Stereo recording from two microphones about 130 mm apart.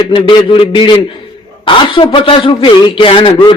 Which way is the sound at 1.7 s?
40° left (ahead or behind).